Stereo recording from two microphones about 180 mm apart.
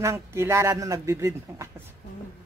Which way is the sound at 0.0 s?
15° right (ahead or behind).